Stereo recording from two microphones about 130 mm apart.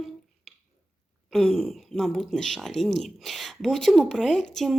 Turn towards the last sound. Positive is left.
turn(degrees=0)  # may be behind; listen again after turning